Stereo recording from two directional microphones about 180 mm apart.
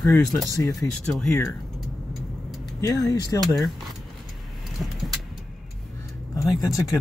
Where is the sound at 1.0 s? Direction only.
5° left (ahead or behind).